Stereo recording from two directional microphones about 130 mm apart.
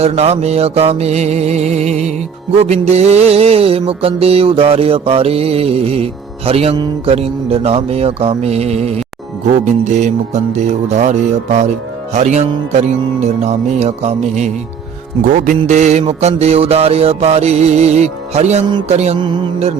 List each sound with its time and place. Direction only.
0.0 s music: 55° right (ahead or behind)
15.3 s music: 75° right (ahead or behind); by 19.1 s 55° right (ahead or behind)